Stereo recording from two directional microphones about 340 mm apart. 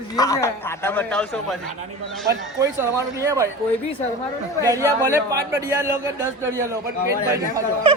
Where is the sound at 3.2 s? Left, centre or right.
Centre.